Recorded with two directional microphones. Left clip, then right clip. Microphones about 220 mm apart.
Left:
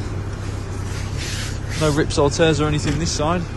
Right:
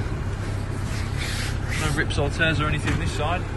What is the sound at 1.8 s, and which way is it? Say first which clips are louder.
Speech: left 9 dB; 20° left (ahead or behind).